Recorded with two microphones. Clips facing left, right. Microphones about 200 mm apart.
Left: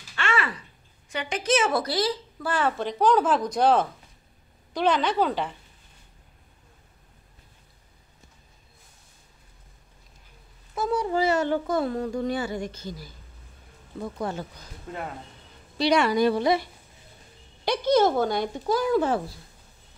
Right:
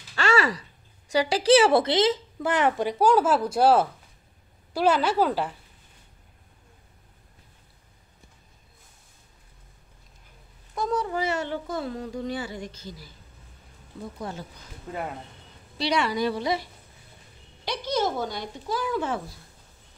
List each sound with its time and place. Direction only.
0.1 s a sound: 40° right (ahead or behind)
1.1 s a woman's voice: 35° right (ahead or behind); by 5.6 s 5° right (ahead or behind)
10.7 s speech: 5° left (ahead or behind)
11.1 s speech: 35° left (ahead or behind)
15.8 s speech: 50° left (ahead or behind)
17.6 s speech: 55° left (ahead or behind); by 19.2 s 40° left (ahead or behind)